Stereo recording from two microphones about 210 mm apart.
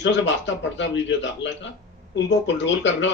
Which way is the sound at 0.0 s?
55° left (ahead or behind).